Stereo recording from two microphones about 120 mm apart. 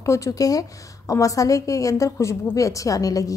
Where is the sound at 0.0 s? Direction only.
25° left (ahead or behind).